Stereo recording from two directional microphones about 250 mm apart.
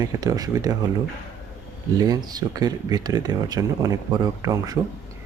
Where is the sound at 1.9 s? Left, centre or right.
Centre.